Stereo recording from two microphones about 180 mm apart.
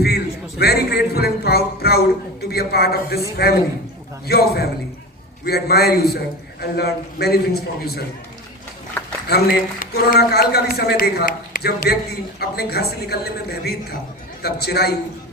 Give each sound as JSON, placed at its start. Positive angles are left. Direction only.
{"t": 0.6, "sound": "a man's voice", "side_deg": 60}
{"t": 9.2, "sound": "a man's voice", "side_deg": 55}